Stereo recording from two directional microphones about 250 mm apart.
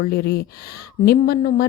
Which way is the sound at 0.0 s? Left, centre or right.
Left.